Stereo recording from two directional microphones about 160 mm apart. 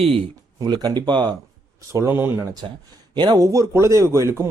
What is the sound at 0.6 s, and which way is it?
Speech, 25° right (ahead or behind).